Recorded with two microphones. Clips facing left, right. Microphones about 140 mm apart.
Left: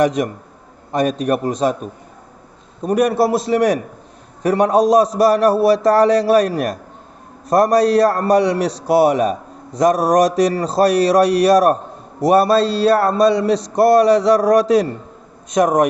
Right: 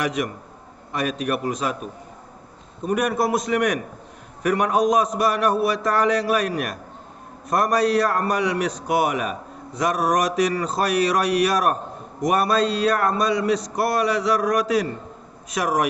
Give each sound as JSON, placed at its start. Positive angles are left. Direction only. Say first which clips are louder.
{"t": 0.0, "sound": "a man's voice", "louder": "left 8 dB", "side_deg": 35}